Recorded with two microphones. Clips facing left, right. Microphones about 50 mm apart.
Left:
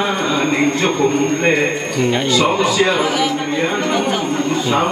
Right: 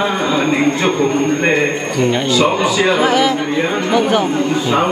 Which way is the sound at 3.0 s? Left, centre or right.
Right.